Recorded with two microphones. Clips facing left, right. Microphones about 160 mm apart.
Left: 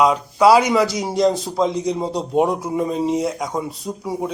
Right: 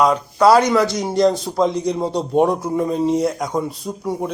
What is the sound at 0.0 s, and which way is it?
A man's voice, 5° left (ahead or behind).